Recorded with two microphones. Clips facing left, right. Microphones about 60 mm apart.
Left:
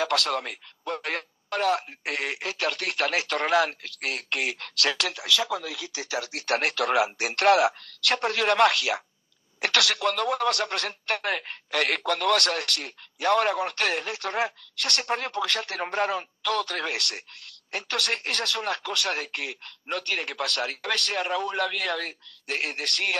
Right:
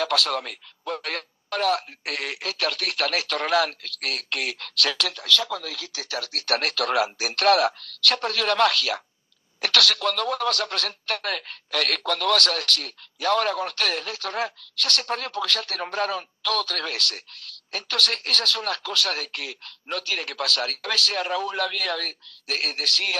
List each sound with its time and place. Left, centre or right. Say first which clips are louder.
0.0 s a man's voice: right 1 dB; centre
6.4 s a man's voice: even; centre